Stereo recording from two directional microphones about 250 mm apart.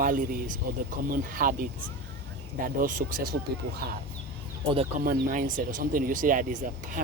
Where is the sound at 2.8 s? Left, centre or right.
Right.